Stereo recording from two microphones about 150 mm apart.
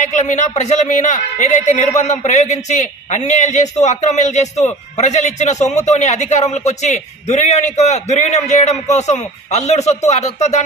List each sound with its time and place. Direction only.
0.0 s speech: 50° left (ahead or behind)